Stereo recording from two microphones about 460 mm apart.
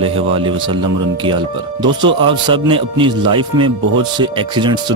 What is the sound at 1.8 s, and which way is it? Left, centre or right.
Speech, centre.